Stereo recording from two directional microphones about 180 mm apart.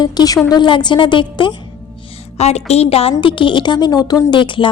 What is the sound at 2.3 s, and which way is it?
A woman's voice, 35° left (ahead or behind).